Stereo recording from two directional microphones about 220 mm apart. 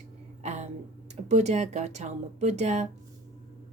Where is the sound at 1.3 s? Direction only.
30° right (ahead or behind).